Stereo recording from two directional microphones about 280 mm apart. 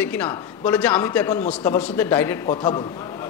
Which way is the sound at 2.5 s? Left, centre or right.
Centre.